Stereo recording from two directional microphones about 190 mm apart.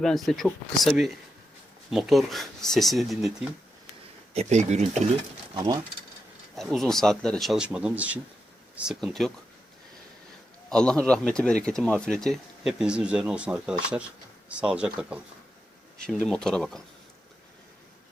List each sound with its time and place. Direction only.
0.0 s speech: centre (ahead or behind)
4.4 s speech: 35° right (ahead or behind)
5.5 s speech: 20° right (ahead or behind)
6.6 s speech: centre (ahead or behind)
10.7 s speech: 5° left (ahead or behind)